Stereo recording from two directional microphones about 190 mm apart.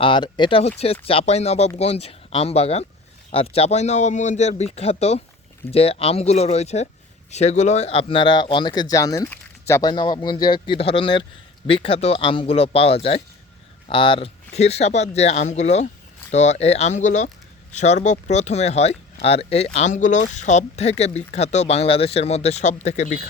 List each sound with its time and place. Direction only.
0.0 s a man's voice: 25° left (ahead or behind)